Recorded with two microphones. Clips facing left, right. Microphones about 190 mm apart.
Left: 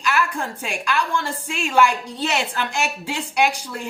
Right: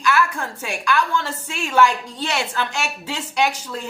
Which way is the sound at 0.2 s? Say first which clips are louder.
Right 1 dB; 15° left (ahead or behind).